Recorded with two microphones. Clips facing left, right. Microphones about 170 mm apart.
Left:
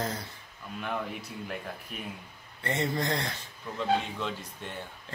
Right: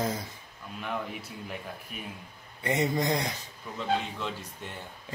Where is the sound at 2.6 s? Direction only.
15° right (ahead or behind).